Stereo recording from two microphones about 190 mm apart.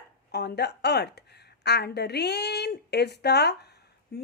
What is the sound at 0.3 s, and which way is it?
A woman's voice, 60° left (ahead or behind).